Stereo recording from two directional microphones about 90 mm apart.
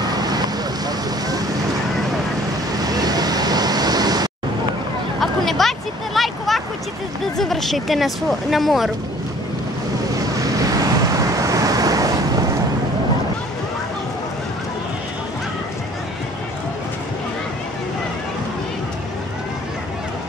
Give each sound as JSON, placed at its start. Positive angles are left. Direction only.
{"t": 0.0, "sound": "vehicle", "side_deg": -50}
{"t": 2.8, "sound": "vehicle", "side_deg": -45}
{"t": 5.2, "sound": "a sound", "side_deg": 0}
{"t": 7.3, "sound": "speech", "side_deg": 5}
{"t": 10.1, "sound": "vehicle", "side_deg": -40}